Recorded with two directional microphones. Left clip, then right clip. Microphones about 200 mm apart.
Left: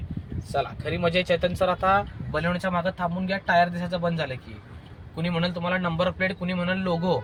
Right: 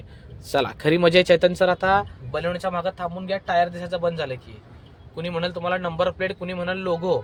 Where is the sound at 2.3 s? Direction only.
Centre (ahead or behind).